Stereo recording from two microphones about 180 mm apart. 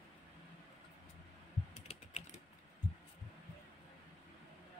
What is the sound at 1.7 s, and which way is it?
Typing, 40° left (ahead or behind).